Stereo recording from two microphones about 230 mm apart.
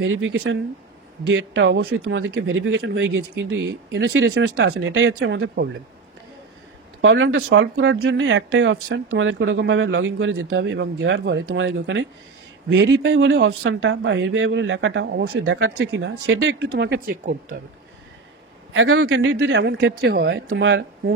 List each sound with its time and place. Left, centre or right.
0.0 s speech: right
7.0 s speech: right
18.7 s speech: right